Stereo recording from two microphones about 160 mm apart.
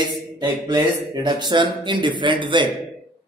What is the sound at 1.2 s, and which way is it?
Speech, 30° right (ahead or behind).